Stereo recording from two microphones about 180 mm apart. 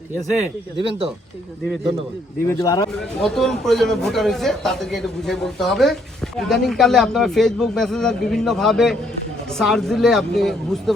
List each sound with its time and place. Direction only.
0.9 s speech: 30° right (ahead or behind)
2.5 s a man's voice: 20° left (ahead or behind)
2.9 s a man's voice: centre (ahead or behind)